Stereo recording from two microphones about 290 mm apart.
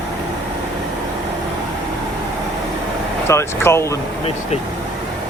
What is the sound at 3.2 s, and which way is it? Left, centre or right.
Speech, centre.